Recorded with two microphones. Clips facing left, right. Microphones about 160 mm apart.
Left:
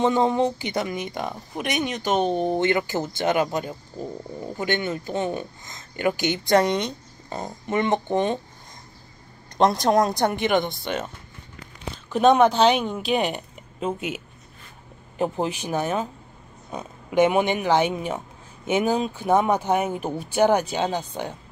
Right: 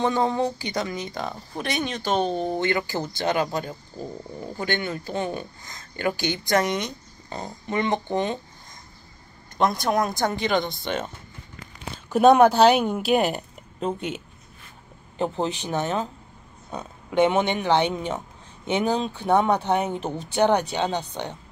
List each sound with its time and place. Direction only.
0.0 s speech: 20° left (ahead or behind)
9.6 s speech: 35° left (ahead or behind)
10.4 s speech: 20° left (ahead or behind)
10.8 s speech: 5° left (ahead or behind)
12.1 s a woman's voice: 10° right (ahead or behind); by 21.0 s 10° left (ahead or behind)